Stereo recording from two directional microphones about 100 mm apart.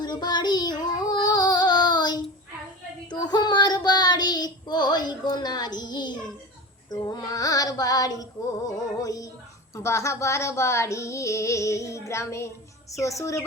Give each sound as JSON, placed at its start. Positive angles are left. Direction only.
{"t": 0.0, "sound": "child singing", "side_deg": 45}
{"t": 6.9, "sound": "female singing", "side_deg": 40}
{"t": 9.7, "sound": "speech", "side_deg": 30}
{"t": 13.0, "sound": "a sound", "side_deg": 30}